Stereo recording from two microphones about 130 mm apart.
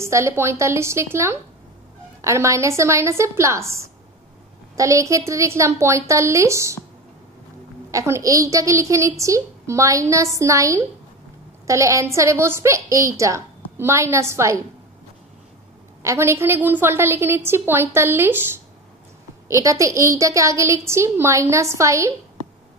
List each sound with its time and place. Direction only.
0.0 s a woman's voice: 20° right (ahead or behind)
7.9 s a woman's voice: 25° right (ahead or behind)
16.0 s a woman's voice: 20° right (ahead or behind)